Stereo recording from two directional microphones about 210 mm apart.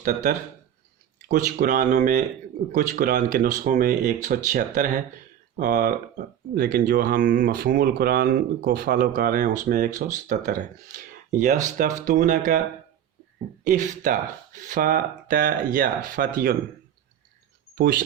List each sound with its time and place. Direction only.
0.0 s speech: 35° right (ahead or behind)
13.7 s speech: 40° right (ahead or behind)